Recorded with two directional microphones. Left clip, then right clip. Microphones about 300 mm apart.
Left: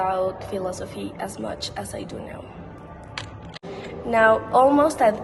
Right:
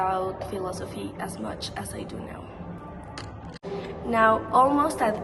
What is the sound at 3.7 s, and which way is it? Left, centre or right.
A woman's voice, centre.